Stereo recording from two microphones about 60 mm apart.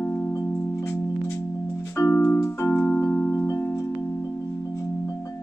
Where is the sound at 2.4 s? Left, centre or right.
Left.